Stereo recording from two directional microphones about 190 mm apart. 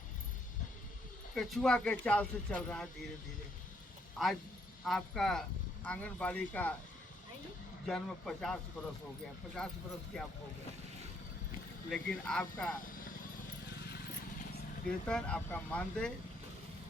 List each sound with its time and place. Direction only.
1.4 s speech: centre (ahead or behind)
4.2 s speech: centre (ahead or behind)
7.9 s speech: centre (ahead or behind)
9.6 s speech: 5° left (ahead or behind)
11.9 s speech: 5° left (ahead or behind)
12.8 s horse: 45° left (ahead or behind)
13.7 s vehicle: 60° left (ahead or behind)
15.0 s speech: 5° left (ahead or behind)